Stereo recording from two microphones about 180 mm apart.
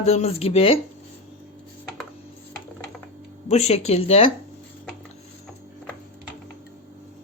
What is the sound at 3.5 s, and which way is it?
Speech, 35° left (ahead or behind).